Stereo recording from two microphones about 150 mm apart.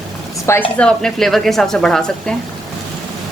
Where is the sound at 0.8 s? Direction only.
5° left (ahead or behind).